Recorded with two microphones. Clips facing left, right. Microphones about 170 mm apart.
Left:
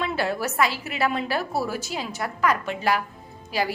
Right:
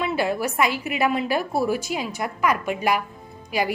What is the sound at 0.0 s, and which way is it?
A woman's voice, 10° right (ahead or behind).